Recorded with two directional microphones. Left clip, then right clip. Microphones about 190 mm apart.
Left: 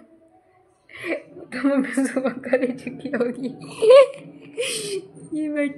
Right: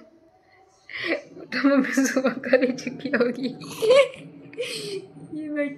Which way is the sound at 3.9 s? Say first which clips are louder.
Left 6 dB; 50° left (ahead or behind).